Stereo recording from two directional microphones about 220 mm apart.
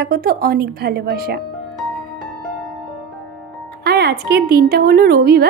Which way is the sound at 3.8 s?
50° right (ahead or behind).